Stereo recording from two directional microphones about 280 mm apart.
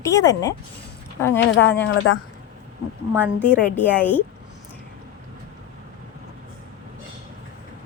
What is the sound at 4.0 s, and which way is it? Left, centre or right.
Speech, centre.